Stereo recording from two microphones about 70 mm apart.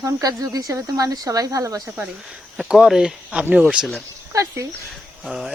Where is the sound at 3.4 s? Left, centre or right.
Right.